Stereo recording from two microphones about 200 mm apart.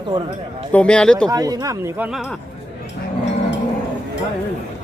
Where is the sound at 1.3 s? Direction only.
20° right (ahead or behind).